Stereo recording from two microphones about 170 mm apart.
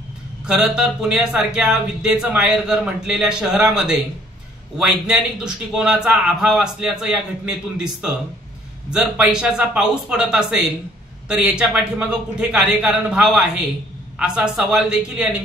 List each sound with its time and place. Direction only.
0.5 s speech: 5° right (ahead or behind)